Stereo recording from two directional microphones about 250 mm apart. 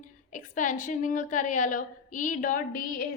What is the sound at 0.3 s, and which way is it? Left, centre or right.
A woman's voice, left.